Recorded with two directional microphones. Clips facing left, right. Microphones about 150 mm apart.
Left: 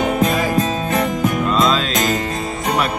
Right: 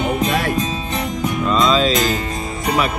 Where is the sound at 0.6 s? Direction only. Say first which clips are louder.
Left 4 dB; 50° left (ahead or behind).